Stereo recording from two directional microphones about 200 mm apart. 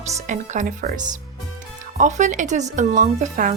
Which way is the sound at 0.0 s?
35° right (ahead or behind).